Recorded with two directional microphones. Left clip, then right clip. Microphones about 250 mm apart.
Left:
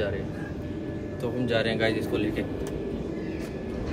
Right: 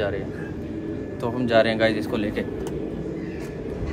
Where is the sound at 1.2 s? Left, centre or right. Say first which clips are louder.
Right 7 dB; centre.